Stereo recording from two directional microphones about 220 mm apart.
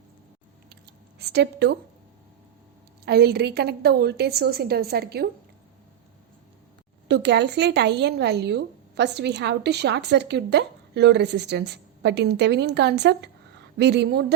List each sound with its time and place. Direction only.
1.2 s speech: 50° right (ahead or behind)
3.1 s speech: 45° right (ahead or behind)
7.1 s speech: 50° right (ahead or behind)